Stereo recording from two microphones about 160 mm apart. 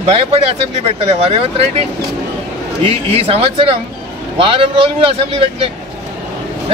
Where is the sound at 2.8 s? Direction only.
35° right (ahead or behind).